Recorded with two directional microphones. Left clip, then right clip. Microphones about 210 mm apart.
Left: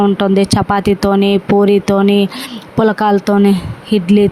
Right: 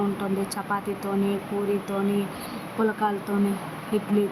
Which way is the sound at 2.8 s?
45° left (ahead or behind).